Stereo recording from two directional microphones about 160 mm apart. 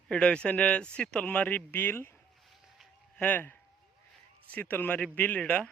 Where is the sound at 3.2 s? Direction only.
10° left (ahead or behind).